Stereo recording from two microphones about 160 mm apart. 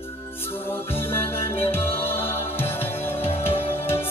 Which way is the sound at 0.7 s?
15° left (ahead or behind).